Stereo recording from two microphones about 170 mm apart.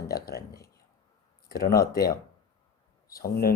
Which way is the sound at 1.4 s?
60° left (ahead or behind).